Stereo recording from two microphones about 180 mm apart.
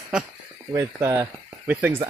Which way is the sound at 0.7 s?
15° right (ahead or behind).